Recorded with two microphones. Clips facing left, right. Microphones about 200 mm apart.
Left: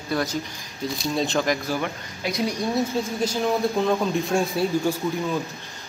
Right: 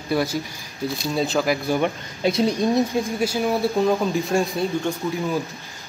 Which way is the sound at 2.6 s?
15° right (ahead or behind).